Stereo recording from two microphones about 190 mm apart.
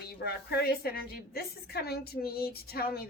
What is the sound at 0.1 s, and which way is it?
A woman's voice, 55° left (ahead or behind).